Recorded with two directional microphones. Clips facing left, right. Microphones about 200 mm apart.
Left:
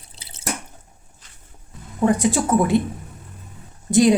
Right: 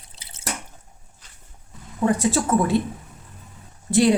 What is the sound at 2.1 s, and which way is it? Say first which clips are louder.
Speech: left 2 dB; 15° left (ahead or behind).